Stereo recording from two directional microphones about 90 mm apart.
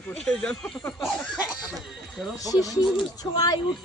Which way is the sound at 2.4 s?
40° left (ahead or behind).